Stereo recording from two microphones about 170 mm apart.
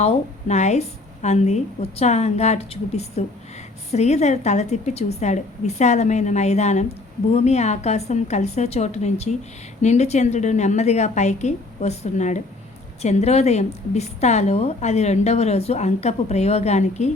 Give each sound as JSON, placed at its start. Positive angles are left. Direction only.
{"t": 0.0, "sound": "a woman's voice", "side_deg": 40}